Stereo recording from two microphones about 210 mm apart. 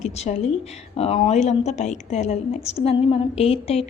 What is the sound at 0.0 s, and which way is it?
A woman's voice, 30° left (ahead or behind).